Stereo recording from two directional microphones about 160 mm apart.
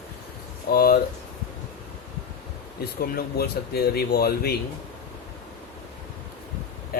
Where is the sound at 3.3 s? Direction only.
75° left (ahead or behind).